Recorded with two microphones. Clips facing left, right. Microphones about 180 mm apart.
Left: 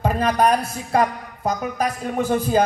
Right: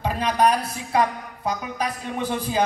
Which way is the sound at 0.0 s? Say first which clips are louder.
Left 2 dB; 50° left (ahead or behind).